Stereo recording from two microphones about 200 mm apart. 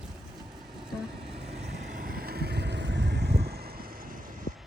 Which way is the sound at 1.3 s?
30° right (ahead or behind).